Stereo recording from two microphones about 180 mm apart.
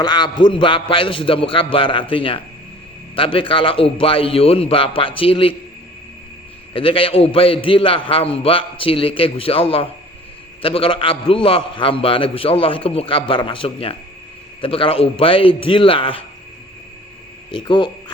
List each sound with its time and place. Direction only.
0.0 s a man's voice: 25° left (ahead or behind)
6.7 s a man's voice: 30° left (ahead or behind)
17.5 s a man's voice: 25° left (ahead or behind)